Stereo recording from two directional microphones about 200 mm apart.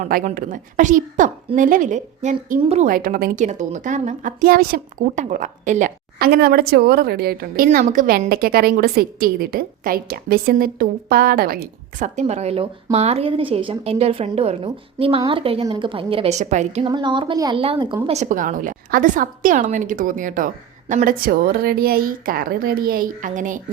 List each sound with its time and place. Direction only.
0.0 s a woman's voice: 40° right (ahead or behind)
2.8 s a woman's voice: 45° right (ahead or behind)
16.9 s a woman's voice: 25° right (ahead or behind); by 23.6 s 40° right (ahead or behind)